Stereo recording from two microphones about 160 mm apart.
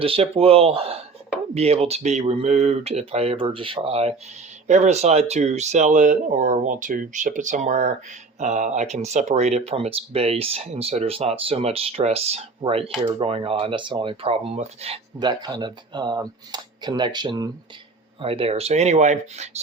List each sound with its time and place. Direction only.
0.0 s speech: 35° right (ahead or behind)
15.2 s speech: 25° right (ahead or behind)
18.2 s speech: 35° right (ahead or behind)